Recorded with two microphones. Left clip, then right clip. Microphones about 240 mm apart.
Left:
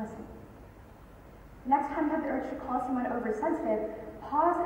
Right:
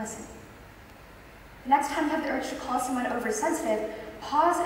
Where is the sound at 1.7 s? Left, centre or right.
Centre.